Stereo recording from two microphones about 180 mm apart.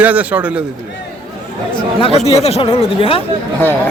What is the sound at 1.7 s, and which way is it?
Speech, 30° left (ahead or behind).